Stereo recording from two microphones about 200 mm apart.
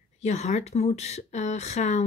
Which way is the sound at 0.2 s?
35° left (ahead or behind).